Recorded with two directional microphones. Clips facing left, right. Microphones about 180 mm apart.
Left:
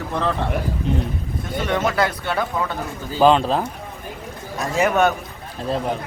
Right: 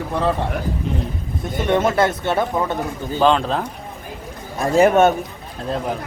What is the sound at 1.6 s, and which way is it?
Speech, 25° right (ahead or behind).